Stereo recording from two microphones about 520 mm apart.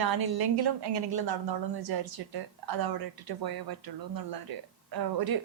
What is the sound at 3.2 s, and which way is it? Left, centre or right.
Speech, right.